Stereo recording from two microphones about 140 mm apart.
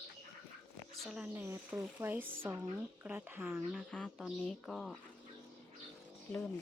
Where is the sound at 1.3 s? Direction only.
15° right (ahead or behind).